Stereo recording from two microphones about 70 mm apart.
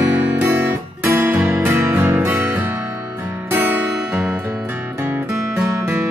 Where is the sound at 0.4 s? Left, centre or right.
Right.